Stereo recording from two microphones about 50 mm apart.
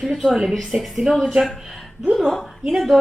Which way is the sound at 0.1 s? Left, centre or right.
Centre.